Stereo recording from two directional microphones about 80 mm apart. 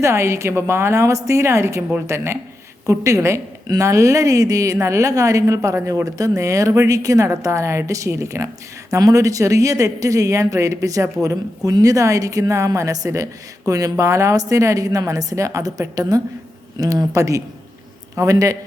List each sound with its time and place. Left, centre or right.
0.0 s a woman's voice: right